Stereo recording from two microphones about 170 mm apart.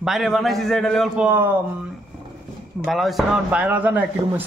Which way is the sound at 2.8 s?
Centre (ahead or behind).